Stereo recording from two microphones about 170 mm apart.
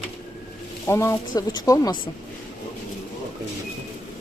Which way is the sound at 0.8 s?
15° left (ahead or behind).